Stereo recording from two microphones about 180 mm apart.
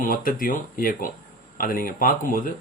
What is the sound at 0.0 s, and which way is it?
Speech, 50° left (ahead or behind).